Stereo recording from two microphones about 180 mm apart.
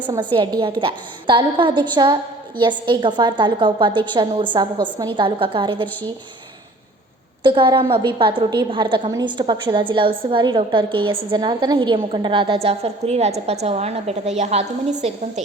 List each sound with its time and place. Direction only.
0.3 s a woman's voice: 25° right (ahead or behind)
7.4 s a woman's voice: 25° right (ahead or behind)